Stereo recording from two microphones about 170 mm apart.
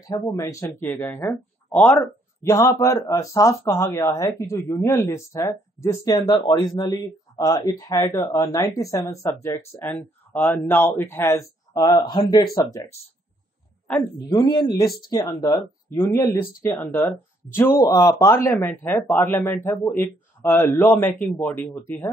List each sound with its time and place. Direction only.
0.0 s speech: 20° left (ahead or behind)
14.3 s speech: 25° left (ahead or behind)